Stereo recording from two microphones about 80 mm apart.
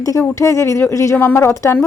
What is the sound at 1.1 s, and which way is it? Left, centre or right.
Speech, left.